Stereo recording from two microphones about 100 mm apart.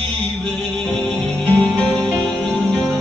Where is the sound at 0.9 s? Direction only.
15° left (ahead or behind).